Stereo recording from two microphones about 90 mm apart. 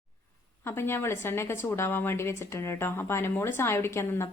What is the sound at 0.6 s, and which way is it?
A woman's voice, 25° left (ahead or behind).